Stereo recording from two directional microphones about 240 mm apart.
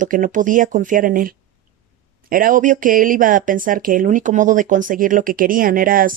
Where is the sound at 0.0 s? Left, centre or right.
Right.